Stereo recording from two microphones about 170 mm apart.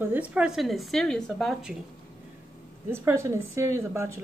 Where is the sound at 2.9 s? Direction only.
15° right (ahead or behind).